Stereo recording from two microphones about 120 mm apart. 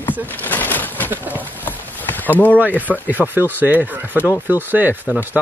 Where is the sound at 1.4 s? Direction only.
15° left (ahead or behind).